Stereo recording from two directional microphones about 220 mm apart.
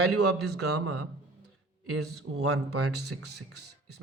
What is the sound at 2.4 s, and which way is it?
Speech, 85° right.